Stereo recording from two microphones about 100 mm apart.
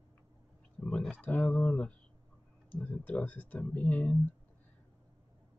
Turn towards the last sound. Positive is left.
turn(degrees=15)  # may be behind; listen again after turning